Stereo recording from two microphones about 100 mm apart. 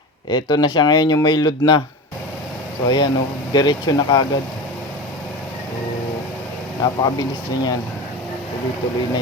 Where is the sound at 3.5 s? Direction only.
45° left (ahead or behind).